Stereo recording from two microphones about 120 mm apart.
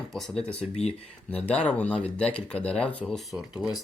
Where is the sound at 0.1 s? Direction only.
Centre (ahead or behind).